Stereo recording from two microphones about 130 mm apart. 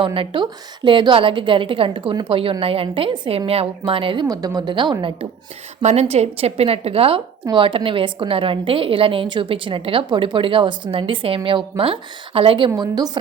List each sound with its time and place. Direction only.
0.0 s a woman's voice: 40° right (ahead or behind)
4.3 s a woman's voice: 30° right (ahead or behind)
5.8 s a woman's voice: 60° right (ahead or behind); by 12.7 s 45° right (ahead or behind)
12.7 s a woman's voice: 30° right (ahead or behind)